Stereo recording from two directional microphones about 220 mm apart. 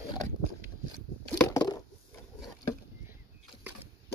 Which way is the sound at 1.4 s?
15° left (ahead or behind).